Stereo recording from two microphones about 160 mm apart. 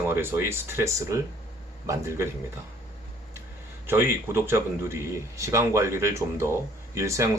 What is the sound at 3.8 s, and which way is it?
Speech, 15° right (ahead or behind).